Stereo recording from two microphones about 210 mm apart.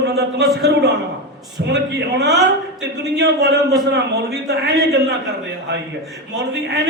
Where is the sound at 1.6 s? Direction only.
55° right (ahead or behind).